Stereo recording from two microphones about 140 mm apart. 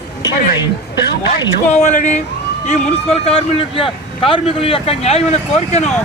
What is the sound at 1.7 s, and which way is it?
Speech, 60° left (ahead or behind).